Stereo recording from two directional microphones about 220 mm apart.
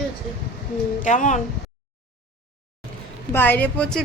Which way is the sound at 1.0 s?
35° left (ahead or behind).